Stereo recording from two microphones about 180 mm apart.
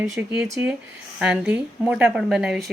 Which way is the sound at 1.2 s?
5° right (ahead or behind).